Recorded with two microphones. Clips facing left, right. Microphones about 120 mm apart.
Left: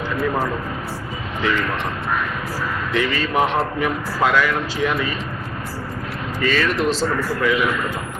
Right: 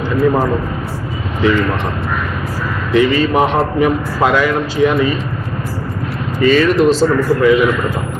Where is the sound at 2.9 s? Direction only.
15° right (ahead or behind).